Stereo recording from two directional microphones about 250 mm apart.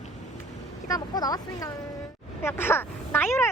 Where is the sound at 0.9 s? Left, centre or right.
Centre.